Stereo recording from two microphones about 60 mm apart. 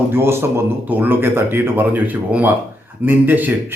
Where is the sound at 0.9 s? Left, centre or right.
Right.